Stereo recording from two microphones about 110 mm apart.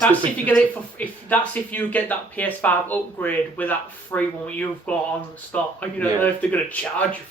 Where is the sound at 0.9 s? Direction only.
15° left (ahead or behind).